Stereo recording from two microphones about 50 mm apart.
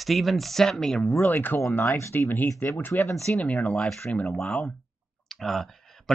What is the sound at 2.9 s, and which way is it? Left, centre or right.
Speech, left.